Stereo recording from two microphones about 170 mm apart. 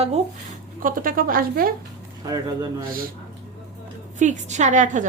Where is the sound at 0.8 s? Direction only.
55° right (ahead or behind).